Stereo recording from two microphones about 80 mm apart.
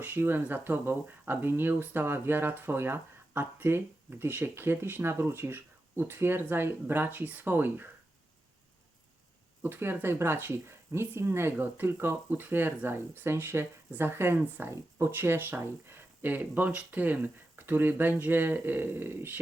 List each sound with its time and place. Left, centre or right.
0.0 s speech: right
9.6 s speech: right